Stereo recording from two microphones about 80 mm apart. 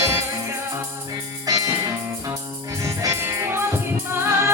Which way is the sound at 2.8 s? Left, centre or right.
Right.